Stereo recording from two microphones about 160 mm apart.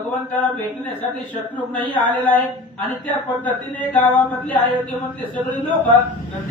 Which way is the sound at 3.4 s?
10° left (ahead or behind).